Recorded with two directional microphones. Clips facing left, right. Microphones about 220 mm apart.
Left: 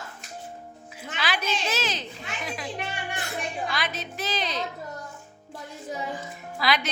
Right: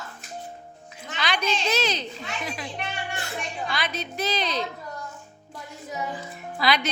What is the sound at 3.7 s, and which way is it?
Speech, centre (ahead or behind).